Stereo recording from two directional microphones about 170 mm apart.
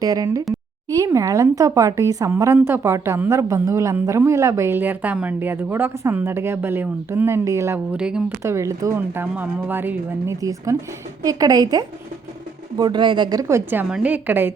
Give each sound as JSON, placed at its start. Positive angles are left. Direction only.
{"t": 0.0, "sound": "a woman's voice", "side_deg": -20}
{"t": 7.9, "sound": "a woman's voice", "side_deg": -5}